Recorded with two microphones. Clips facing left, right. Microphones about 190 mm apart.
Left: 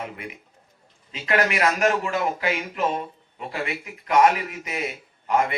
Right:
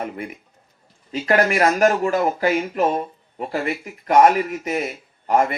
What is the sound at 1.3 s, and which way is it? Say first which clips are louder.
Speech: right 4 dB; 45° right (ahead or behind).